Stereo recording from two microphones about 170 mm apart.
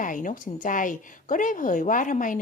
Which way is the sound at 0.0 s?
50° left (ahead or behind).